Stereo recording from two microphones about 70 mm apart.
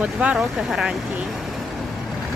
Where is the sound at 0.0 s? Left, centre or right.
Centre.